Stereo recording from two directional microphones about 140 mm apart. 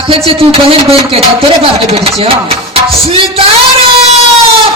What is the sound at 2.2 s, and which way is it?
Music, 45° right (ahead or behind).